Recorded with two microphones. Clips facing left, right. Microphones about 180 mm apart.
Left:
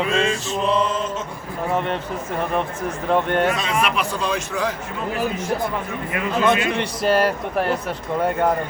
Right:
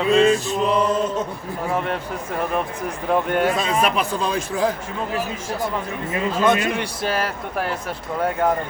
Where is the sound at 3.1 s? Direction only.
5° right (ahead or behind).